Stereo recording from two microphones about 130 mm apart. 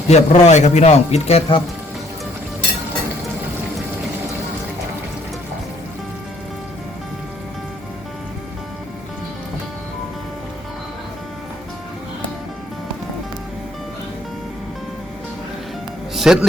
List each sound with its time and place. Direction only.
0.1 s speech: 60° left (ahead or behind)
16.1 s speech: 5° right (ahead or behind)